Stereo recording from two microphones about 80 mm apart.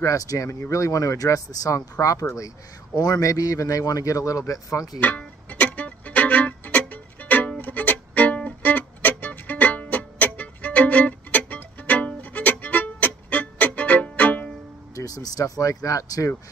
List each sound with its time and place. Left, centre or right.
0.0 s a man's voice: left
5.0 s music: centre
15.0 s speech: left